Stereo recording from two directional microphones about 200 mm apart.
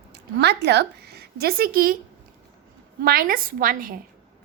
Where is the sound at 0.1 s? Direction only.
55° right (ahead or behind).